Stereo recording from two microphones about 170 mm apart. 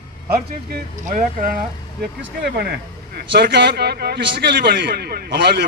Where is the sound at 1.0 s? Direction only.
50° right (ahead or behind).